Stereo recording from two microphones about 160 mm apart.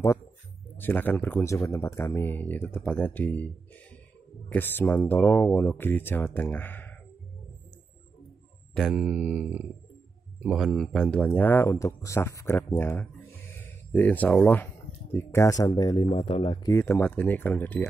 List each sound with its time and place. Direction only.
0.7 s speech: 10° left (ahead or behind)
8.7 s speech: 5° right (ahead or behind); by 16.1 s 25° left (ahead or behind)
16.1 s speech: 40° left (ahead or behind)
16.6 s speech: 15° left (ahead or behind)